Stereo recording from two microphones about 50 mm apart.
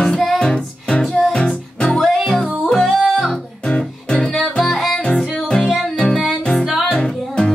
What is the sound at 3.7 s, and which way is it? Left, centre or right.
Music, left.